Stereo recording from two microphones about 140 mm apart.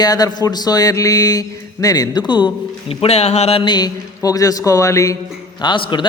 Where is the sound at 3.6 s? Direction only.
30° left (ahead or behind).